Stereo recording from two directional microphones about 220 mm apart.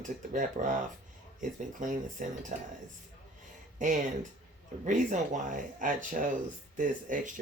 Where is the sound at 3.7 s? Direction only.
35° right (ahead or behind).